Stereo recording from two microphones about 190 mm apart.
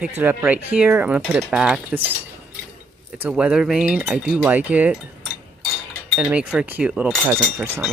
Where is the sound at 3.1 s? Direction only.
5° right (ahead or behind).